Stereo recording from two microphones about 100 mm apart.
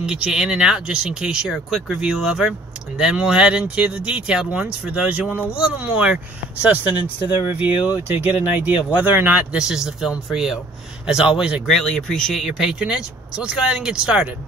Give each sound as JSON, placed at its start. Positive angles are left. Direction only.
{"t": 0.0, "sound": "speech", "side_deg": -5}
{"t": 9.6, "sound": "speech", "side_deg": -5}
{"t": 11.7, "sound": "speech", "side_deg": 5}